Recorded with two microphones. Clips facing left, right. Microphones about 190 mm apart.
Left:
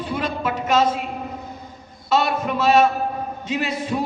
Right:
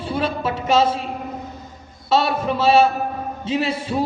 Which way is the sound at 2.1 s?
30° right (ahead or behind).